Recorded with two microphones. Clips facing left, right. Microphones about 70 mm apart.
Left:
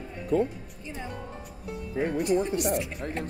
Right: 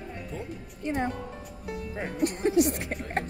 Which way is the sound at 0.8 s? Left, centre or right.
Right.